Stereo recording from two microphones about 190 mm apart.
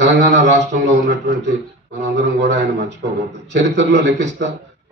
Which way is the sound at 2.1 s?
65° right (ahead or behind).